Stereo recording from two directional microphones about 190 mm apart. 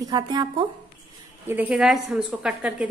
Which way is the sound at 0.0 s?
20° right (ahead or behind).